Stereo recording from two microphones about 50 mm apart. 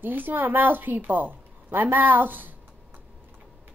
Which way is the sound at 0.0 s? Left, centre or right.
Right.